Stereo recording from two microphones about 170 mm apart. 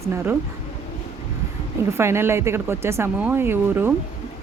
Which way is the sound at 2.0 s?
15° right (ahead or behind).